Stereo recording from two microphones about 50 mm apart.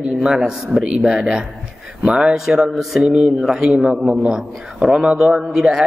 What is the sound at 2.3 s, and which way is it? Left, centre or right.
Speech, centre.